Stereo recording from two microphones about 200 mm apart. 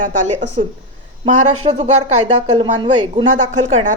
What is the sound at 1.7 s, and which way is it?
Speech, 35° right (ahead or behind).